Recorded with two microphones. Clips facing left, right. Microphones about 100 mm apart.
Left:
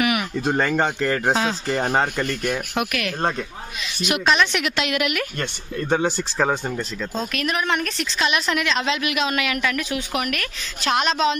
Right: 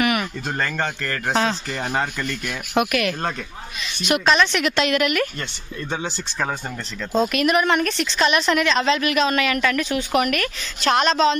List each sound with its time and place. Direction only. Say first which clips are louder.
0.0 s a sound: right 1 dB; 5° left (ahead or behind)
0.5 s a man's voice: left 6 dB; 15° left (ahead or behind)
1.3 s a man's voice: right 1 dB; 5° left (ahead or behind)
1.7 s speech: left 4 dB; 30° left (ahead or behind)
2.7 s a woman's voice: right 4 dB; centre (ahead or behind)
5.9 s speech: left 7 dB; 45° left (ahead or behind)
7.2 s a woman's voice: right 7 dB; 5° right (ahead or behind)